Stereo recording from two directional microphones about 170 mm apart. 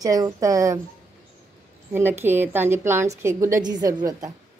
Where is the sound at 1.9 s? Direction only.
15° right (ahead or behind).